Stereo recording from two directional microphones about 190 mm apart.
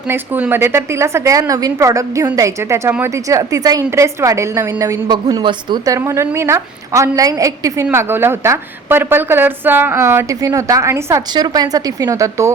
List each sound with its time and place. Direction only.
0.1 s a woman's voice: 10° right (ahead or behind)